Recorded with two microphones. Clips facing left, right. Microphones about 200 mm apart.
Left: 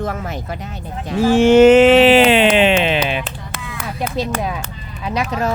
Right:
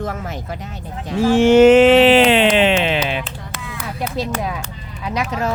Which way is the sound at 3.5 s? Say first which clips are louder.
Even; 60° left (ahead or behind).